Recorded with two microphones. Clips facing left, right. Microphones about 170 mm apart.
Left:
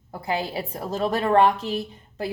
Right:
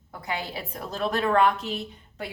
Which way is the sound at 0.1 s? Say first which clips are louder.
Left 5 dB; 35° left (ahead or behind).